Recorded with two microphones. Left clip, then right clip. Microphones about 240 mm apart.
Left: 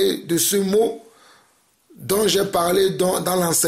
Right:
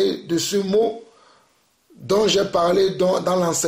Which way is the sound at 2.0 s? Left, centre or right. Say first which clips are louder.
Right 1 dB; left.